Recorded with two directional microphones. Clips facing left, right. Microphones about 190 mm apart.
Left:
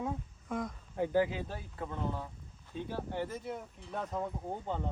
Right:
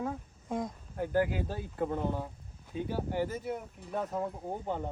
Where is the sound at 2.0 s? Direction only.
15° right (ahead or behind).